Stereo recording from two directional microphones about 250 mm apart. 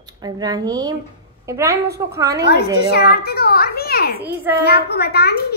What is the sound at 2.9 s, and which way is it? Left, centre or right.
A child's voice, left.